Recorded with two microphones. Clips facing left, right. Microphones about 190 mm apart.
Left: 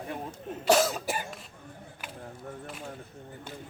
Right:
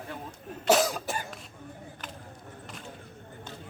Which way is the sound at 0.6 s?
Centre (ahead or behind).